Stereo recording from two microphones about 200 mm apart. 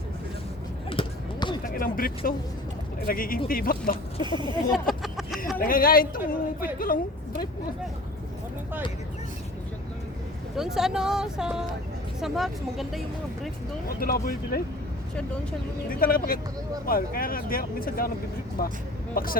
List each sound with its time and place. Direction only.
0.9 s a sound: 25° left (ahead or behind)
1.6 s speech: 45° left (ahead or behind)
4.2 s speech: 25° right (ahead or behind)
4.7 s a sound: centre (ahead or behind)
5.5 s speech: 45° left (ahead or behind)
10.6 s speech: centre (ahead or behind)
13.8 s speech: 45° left (ahead or behind)
15.9 s speech: 45° left (ahead or behind)